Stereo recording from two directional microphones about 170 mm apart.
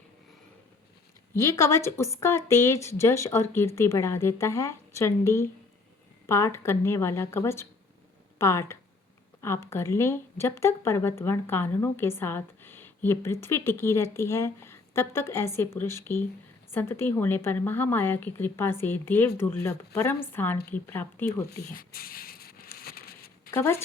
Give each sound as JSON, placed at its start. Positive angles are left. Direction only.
{"t": 1.3, "sound": "a woman's voice", "side_deg": 15}
{"t": 21.5, "sound": "speech", "side_deg": 65}
{"t": 22.8, "sound": "a sound", "side_deg": 65}
{"t": 23.5, "sound": "speech", "side_deg": 15}